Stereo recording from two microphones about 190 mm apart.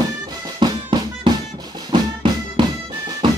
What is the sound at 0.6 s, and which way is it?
Music, 25° right (ahead or behind).